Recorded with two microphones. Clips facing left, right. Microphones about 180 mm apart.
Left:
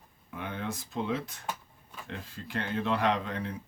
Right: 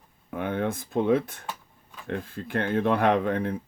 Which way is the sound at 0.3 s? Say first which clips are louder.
Right 9 dB; 55° right (ahead or behind).